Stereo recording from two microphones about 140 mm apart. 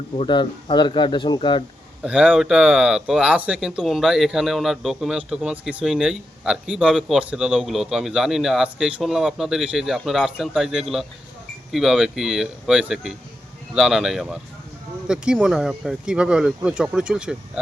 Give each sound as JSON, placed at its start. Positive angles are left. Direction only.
{"t": 0.2, "sound": "speech", "side_deg": 35}
{"t": 2.0, "sound": "speech", "side_deg": -10}